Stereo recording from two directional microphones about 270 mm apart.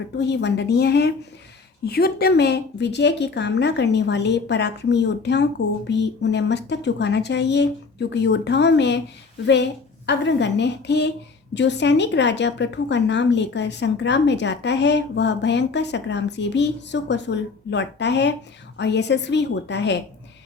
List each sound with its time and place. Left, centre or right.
0.2 s a woman's voice: left
10.1 s a woman's voice: left